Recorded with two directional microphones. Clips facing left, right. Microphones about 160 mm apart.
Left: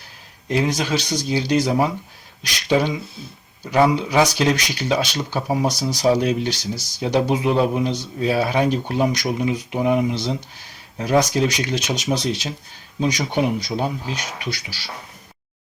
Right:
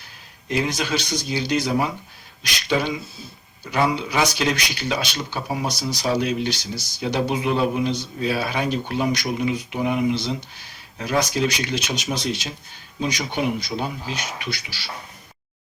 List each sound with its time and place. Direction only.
0.4 s speech: 40° left (ahead or behind)